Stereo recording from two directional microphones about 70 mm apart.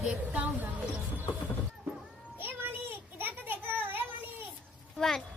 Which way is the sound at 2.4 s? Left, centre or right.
Right.